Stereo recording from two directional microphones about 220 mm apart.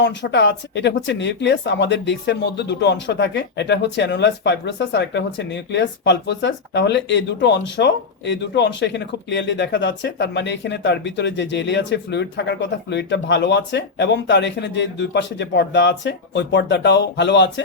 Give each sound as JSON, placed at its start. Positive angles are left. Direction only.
{"t": 0.0, "sound": "speech", "side_deg": 55}